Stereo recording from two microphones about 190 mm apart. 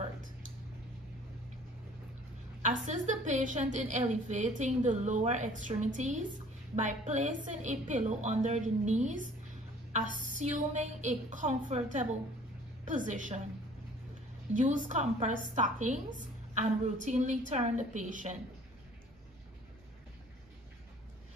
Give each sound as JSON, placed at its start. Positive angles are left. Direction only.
{"t": 2.6, "sound": "a woman's voice", "side_deg": -40}
{"t": 14.5, "sound": "a woman's voice", "side_deg": -40}